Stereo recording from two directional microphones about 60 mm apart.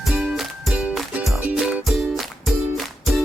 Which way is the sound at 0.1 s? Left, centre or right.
Centre.